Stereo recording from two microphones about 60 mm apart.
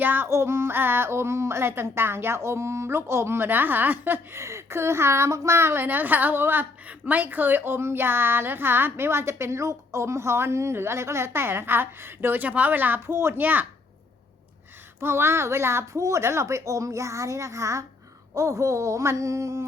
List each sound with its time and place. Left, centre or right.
0.0 s a sound: right
0.3 s speech: right
4.4 s a woman's voice: right
13.1 s speech: right
13.4 s a woman's voice: right
15.0 s speech: right